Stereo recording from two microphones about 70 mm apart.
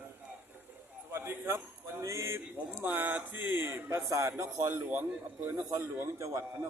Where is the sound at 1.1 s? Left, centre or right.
Right.